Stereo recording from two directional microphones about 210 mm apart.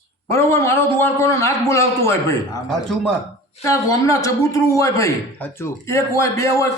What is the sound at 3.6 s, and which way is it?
A man's voice, 15° left (ahead or behind).